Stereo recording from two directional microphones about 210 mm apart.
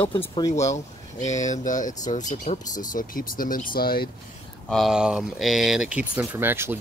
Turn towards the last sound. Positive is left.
turn(degrees=-10)  # may be behind; listen again after turning